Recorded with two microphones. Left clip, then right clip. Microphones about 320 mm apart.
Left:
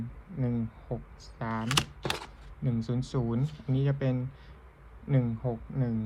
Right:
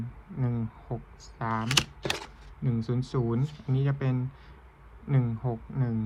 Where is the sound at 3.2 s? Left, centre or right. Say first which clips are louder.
Right 3 dB; right.